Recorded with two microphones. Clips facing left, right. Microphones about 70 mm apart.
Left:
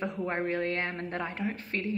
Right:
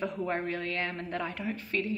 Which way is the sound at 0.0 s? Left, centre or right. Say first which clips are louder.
Even; left.